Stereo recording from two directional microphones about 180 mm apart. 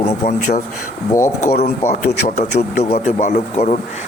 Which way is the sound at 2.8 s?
40° left (ahead or behind).